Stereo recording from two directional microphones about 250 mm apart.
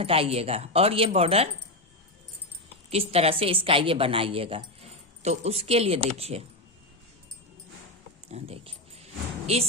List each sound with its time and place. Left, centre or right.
0.0 s a woman's voice: right
2.9 s a woman's voice: right
8.3 s dog: right